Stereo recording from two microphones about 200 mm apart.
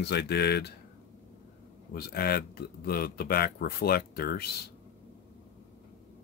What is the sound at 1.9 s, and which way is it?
Speech, 50° left (ahead or behind).